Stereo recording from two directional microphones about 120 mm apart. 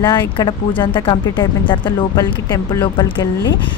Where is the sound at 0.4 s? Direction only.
40° left (ahead or behind).